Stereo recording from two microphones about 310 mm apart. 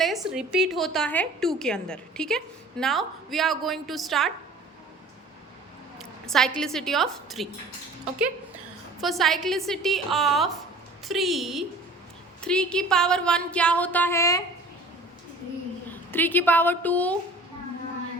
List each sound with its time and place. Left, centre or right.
0.0 s a woman's voice: centre
6.0 s a woman's voice: centre
9.0 s a woman's voice: centre
15.9 s a woman's voice: centre